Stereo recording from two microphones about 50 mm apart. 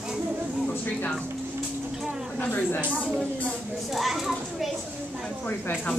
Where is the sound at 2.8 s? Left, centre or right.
Right.